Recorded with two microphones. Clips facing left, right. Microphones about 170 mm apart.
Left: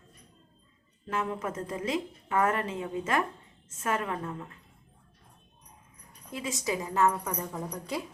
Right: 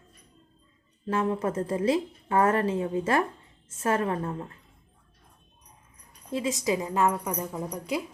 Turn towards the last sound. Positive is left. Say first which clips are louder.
# right 4 dB
turn(degrees=-10)  # may be behind; listen again after turning